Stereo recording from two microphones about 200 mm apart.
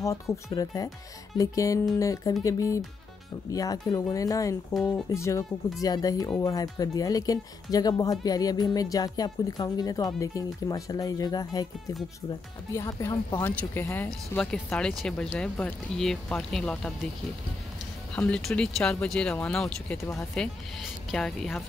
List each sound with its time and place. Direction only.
0.0 s speech: 15° left (ahead or behind)
4.7 s speech: 5° left (ahead or behind)
12.7 s speech: 15° left (ahead or behind)
18.1 s speech: 5° left (ahead or behind)